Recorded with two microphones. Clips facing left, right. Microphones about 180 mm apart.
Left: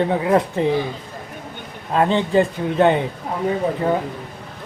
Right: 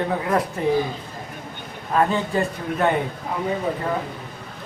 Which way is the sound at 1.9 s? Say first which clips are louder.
Left 4 dB; 25° left (ahead or behind).